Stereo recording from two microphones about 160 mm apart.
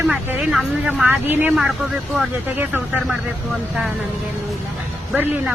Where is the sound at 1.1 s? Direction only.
10° right (ahead or behind).